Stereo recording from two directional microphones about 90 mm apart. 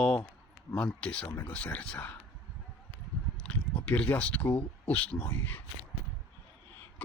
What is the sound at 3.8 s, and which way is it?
Speech, 15° left (ahead or behind).